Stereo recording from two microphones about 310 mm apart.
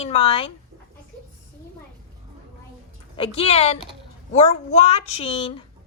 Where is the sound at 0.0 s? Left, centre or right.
Centre.